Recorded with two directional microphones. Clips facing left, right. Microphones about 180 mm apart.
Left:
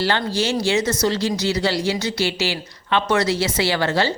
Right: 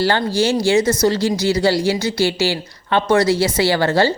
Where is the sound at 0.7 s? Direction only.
30° right (ahead or behind).